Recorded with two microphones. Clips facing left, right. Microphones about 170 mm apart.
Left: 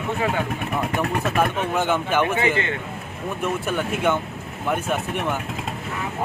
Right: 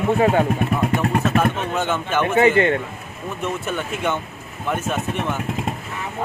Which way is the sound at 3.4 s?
10° left (ahead or behind).